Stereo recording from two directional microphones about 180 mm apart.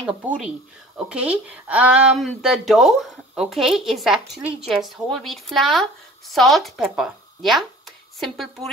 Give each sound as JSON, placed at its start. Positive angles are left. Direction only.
{"t": 0.4, "sound": "speech", "side_deg": -5}